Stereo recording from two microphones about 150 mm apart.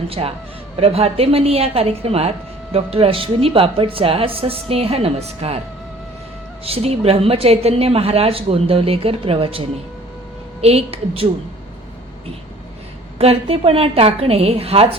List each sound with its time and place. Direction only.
0.1 s a woman's voice: 40° right (ahead or behind)
6.7 s a woman's voice: 40° right (ahead or behind)
13.1 s a woman's voice: 40° right (ahead or behind)